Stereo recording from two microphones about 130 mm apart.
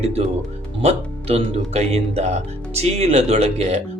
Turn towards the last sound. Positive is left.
turn(degrees=-60)  # may be behind; listen again after turning